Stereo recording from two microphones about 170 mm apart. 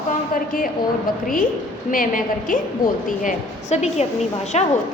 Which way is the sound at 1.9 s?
55° left (ahead or behind).